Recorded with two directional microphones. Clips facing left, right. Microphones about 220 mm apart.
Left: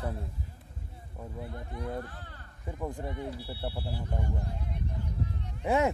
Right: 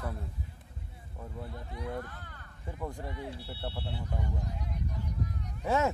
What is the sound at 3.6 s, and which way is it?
Speech, 5° left (ahead or behind).